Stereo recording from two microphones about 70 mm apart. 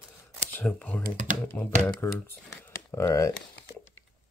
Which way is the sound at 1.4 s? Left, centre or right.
Left.